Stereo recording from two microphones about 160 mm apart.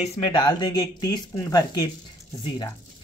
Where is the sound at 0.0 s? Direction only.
30° left (ahead or behind).